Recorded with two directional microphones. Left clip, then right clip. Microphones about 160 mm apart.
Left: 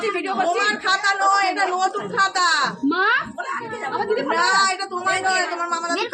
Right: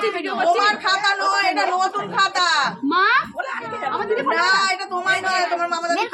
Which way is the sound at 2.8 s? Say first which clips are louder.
Right 5 dB; 5° left (ahead or behind).